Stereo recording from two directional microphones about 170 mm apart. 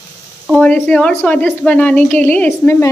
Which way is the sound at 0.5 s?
10° left (ahead or behind).